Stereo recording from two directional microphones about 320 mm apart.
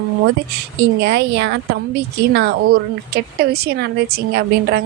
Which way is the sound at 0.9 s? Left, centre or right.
Right.